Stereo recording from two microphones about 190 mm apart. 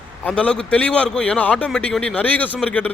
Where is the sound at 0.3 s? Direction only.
5° left (ahead or behind).